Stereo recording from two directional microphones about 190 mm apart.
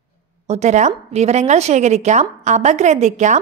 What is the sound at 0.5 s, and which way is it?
A woman's voice, 40° right (ahead or behind).